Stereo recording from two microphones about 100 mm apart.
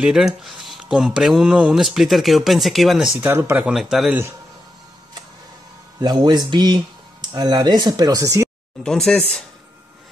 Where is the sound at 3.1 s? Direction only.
25° right (ahead or behind).